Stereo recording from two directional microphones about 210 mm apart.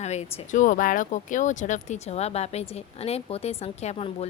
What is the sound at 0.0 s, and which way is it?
A woman's voice, 30° left (ahead or behind).